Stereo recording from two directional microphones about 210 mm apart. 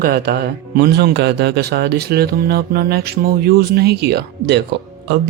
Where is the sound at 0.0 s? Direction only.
45° right (ahead or behind).